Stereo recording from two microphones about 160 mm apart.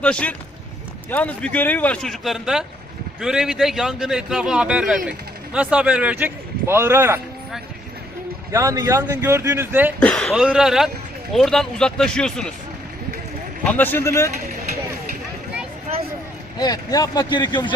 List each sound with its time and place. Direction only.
0.0 s a man's voice: 5° left (ahead or behind); by 7.2 s 15° right (ahead or behind)
8.5 s speech: 20° right (ahead or behind)
10.0 s a man's voice: 5° left (ahead or behind)
13.7 s speech: 10° left (ahead or behind)
16.6 s speech: 25° left (ahead or behind)